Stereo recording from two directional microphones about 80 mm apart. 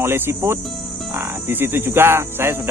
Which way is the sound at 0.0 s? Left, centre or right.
Right.